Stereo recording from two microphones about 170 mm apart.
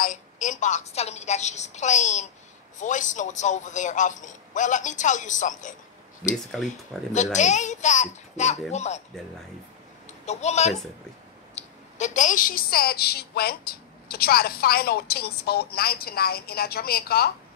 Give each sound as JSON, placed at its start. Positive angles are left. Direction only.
{"t": 0.0, "sound": "a man's voice", "side_deg": 45}
{"t": 6.3, "sound": "speech", "side_deg": 0}
{"t": 7.3, "sound": "a man's voice", "side_deg": 45}
{"t": 10.2, "sound": "a woman's voice", "side_deg": 40}